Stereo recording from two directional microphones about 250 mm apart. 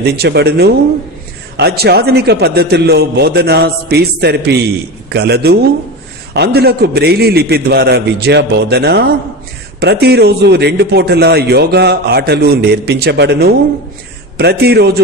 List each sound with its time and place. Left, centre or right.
0.0 s a man's voice: right